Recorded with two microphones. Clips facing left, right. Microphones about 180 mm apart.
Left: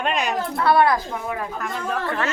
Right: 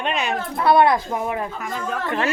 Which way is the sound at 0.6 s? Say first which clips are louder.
Right 2 dB; 20° right (ahead or behind).